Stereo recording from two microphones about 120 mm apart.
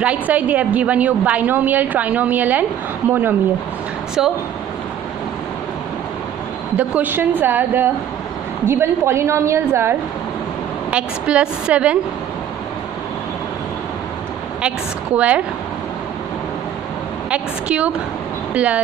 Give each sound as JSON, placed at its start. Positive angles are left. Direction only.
{"t": 0.0, "sound": "a woman's voice", "side_deg": -10}
{"t": 4.2, "sound": "speech", "side_deg": -5}
{"t": 6.8, "sound": "a woman's voice", "side_deg": -15}
{"t": 10.9, "sound": "a woman's voice", "side_deg": -10}
{"t": 15.1, "sound": "a woman's voice", "side_deg": -10}
{"t": 17.3, "sound": "a woman's voice", "side_deg": -10}